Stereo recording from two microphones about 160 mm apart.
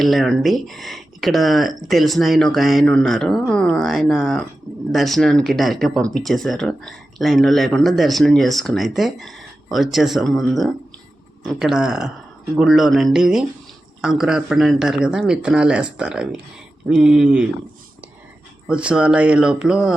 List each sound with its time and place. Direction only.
0.0 s speech: centre (ahead or behind)
18.7 s speech: 5° right (ahead or behind)